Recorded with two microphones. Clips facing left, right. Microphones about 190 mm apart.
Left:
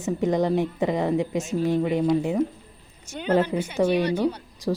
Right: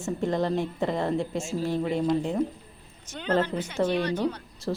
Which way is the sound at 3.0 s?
10° left (ahead or behind).